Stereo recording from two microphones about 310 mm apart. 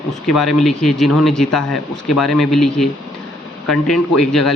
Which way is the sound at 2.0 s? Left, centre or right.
Left.